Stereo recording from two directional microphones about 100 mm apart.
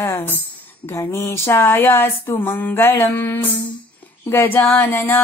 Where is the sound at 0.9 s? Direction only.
30° left (ahead or behind).